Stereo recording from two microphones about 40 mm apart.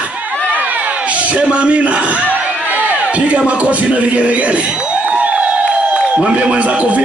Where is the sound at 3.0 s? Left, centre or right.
Right.